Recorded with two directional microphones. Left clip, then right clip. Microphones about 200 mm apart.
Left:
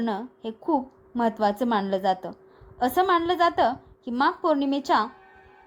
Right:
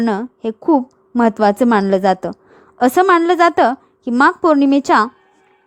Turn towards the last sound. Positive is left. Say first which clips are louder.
# right 11 dB
turn(degrees=-45)  # may be behind; listen again after turning